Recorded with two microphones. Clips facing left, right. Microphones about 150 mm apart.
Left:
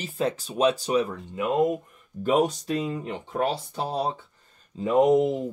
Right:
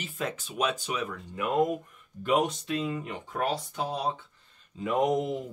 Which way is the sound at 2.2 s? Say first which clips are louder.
Left 4 dB; 40° left (ahead or behind).